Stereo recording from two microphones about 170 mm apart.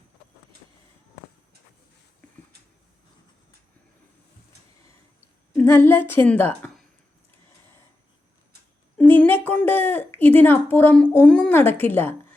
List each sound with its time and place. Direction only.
5.5 s a woman's voice: 15° left (ahead or behind)
9.0 s a sound: 10° left (ahead or behind)
10.2 s speech: 10° left (ahead or behind)